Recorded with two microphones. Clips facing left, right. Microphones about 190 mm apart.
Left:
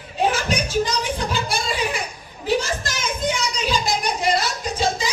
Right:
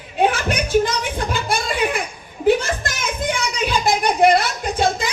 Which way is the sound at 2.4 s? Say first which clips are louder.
Right 5 dB; 55° right (ahead or behind).